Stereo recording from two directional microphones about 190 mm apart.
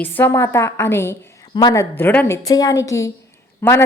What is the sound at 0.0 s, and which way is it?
A woman's voice, 10° left (ahead or behind).